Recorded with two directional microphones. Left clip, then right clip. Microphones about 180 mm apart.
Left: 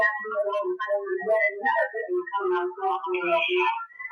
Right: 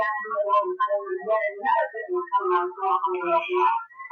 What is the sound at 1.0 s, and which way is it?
Music, 35° left (ahead or behind).